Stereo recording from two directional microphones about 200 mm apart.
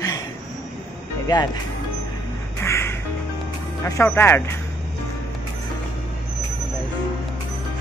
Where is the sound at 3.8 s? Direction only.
10° left (ahead or behind).